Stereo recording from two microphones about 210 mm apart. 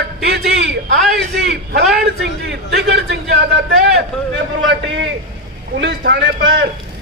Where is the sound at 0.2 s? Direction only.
50° right (ahead or behind).